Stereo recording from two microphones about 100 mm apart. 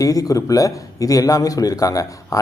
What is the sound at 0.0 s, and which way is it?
A man's voice, 35° left (ahead or behind).